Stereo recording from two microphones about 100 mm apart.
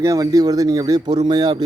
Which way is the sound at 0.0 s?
35° right (ahead or behind).